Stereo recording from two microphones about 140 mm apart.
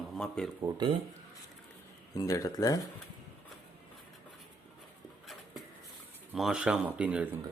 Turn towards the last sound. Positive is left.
turn(degrees=-10)  # may be behind; listen again after turning